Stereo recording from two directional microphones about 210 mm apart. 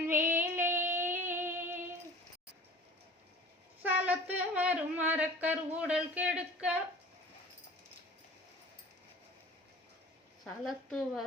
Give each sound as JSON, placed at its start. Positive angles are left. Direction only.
{"t": 0.1, "sound": "music", "side_deg": -10}
{"t": 3.9, "sound": "a sound", "side_deg": -5}
{"t": 10.4, "sound": "a woman's voice", "side_deg": 0}